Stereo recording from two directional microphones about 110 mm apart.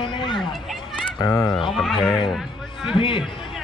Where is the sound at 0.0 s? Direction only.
45° left (ahead or behind).